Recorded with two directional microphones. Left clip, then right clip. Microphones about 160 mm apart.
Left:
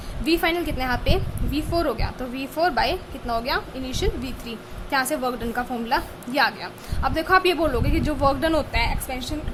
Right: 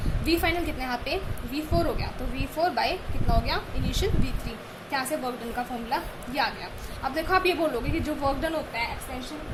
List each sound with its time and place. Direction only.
0.3 s a woman's voice: 20° left (ahead or behind)